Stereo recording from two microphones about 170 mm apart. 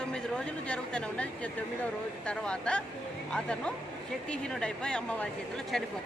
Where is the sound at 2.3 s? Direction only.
5° left (ahead or behind).